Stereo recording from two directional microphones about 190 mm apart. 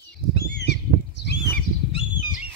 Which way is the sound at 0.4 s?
60° left (ahead or behind).